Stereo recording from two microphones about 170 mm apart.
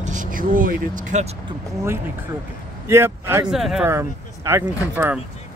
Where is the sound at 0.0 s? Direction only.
45° right (ahead or behind).